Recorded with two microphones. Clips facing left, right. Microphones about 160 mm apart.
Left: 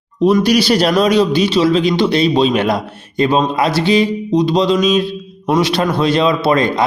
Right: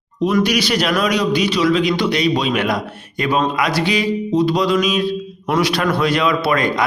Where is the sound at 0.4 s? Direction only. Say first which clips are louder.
Left 5 dB; 35° left (ahead or behind).